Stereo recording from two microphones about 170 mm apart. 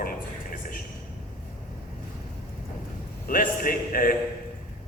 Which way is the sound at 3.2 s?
55° left (ahead or behind).